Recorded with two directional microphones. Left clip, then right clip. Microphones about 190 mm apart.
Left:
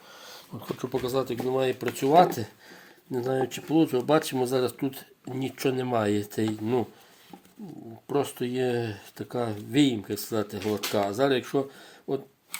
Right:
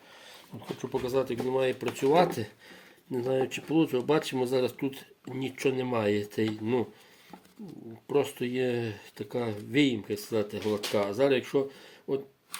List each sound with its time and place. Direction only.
0.8 s speech: 35° left (ahead or behind)
8.0 s speech: 30° left (ahead or behind)